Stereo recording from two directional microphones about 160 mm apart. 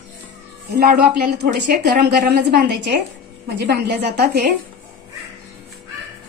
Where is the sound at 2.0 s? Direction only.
85° right.